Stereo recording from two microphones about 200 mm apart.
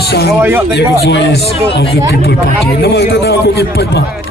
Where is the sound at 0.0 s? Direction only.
55° left (ahead or behind).